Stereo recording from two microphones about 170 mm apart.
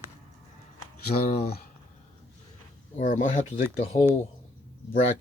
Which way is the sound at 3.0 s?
45° left (ahead or behind).